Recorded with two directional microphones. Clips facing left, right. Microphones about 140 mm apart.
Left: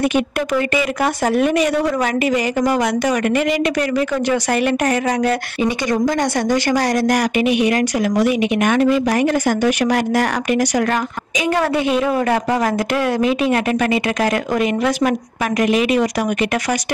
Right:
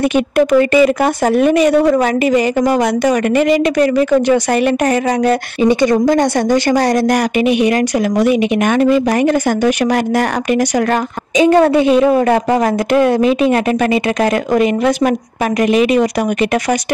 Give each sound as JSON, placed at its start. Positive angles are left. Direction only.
{"t": 0.1, "sound": "a woman's voice", "side_deg": -30}